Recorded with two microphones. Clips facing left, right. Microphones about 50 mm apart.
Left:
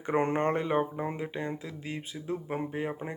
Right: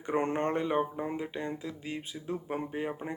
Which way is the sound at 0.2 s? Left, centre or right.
Left.